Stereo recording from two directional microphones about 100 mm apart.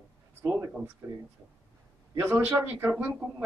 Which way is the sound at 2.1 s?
20° right (ahead or behind).